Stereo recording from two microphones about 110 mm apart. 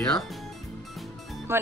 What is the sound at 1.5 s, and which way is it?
Speech, 20° right (ahead or behind).